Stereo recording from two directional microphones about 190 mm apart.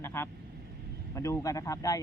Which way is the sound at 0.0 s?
15° left (ahead or behind).